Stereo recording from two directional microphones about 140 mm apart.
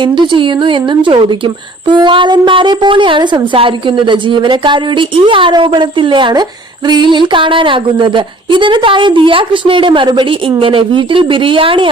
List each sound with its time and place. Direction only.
0.0 s speech: 35° right (ahead or behind)